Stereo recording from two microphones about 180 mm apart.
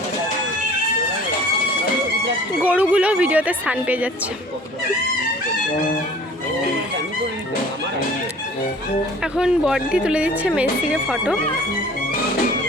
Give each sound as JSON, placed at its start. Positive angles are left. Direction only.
{"t": 2.6, "sound": "speech", "side_deg": -10}
{"t": 9.2, "sound": "speech", "side_deg": -5}